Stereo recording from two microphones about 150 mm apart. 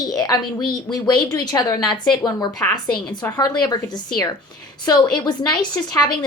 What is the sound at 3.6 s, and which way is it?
Speech, 25° left (ahead or behind).